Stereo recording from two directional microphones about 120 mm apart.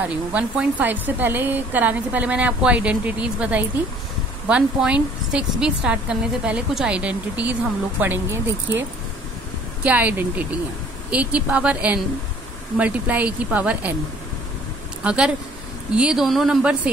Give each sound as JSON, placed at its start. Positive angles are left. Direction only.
{"t": 0.0, "sound": "speech", "side_deg": -10}
{"t": 9.8, "sound": "speech", "side_deg": -15}
{"t": 15.0, "sound": "a woman's voice", "side_deg": -10}